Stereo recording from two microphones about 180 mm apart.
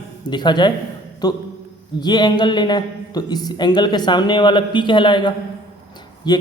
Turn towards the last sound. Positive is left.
turn(degrees=25)  # may be behind; listen again after turning